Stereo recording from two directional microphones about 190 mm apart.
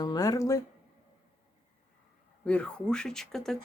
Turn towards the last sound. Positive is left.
turn(degrees=0)  # may be behind; listen again after turning